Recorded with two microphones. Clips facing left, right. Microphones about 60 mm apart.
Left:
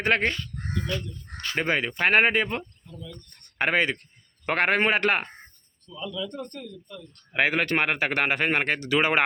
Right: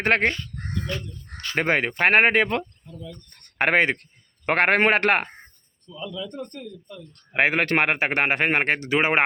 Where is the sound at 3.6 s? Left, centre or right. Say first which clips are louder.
Right 4 dB; right.